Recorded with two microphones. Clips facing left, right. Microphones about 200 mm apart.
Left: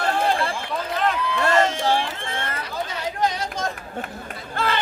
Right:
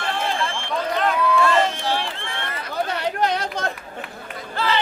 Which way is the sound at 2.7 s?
65° right (ahead or behind).